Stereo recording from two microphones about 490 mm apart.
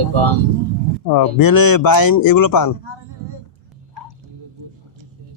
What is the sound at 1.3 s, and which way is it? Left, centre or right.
A man's voice, left.